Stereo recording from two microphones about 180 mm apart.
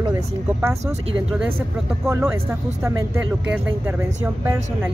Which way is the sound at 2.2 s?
15° right (ahead or behind).